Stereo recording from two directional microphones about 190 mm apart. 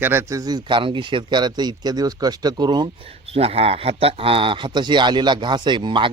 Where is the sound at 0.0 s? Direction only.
15° right (ahead or behind).